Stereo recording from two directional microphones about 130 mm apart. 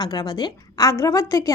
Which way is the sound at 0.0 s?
30° left (ahead or behind).